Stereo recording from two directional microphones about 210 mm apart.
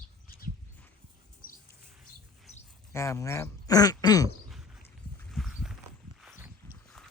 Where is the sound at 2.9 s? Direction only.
15° left (ahead or behind).